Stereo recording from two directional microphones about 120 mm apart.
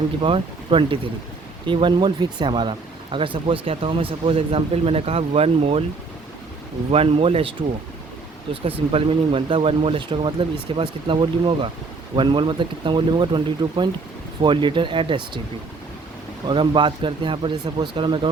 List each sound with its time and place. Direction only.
0.2 s speech: 50° right (ahead or behind)
6.9 s speech: 55° right (ahead or behind)
8.6 s speech: 50° right (ahead or behind)
16.5 s speech: 45° right (ahead or behind)